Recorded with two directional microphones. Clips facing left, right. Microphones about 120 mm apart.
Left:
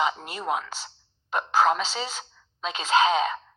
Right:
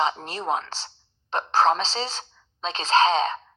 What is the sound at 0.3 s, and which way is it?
A woman's voice, 35° right (ahead or behind).